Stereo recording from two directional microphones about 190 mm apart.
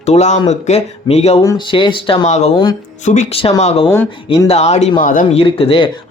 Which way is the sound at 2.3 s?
40° left (ahead or behind).